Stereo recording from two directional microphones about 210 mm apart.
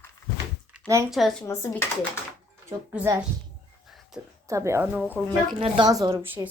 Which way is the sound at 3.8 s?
Centre (ahead or behind).